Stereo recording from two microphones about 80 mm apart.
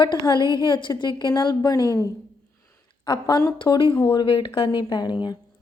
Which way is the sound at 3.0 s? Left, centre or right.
Left.